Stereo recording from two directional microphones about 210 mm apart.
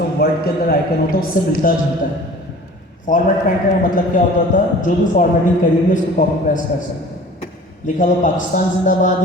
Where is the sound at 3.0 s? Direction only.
40° left (ahead or behind).